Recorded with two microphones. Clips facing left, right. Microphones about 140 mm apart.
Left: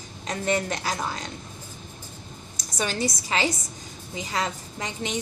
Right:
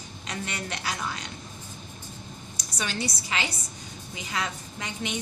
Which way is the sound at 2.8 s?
45° left (ahead or behind).